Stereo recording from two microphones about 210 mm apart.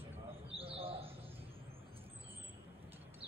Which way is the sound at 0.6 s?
25° right (ahead or behind).